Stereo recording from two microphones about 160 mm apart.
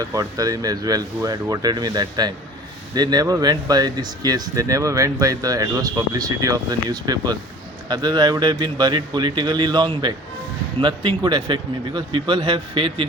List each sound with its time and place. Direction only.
0.0 s speech: 20° right (ahead or behind)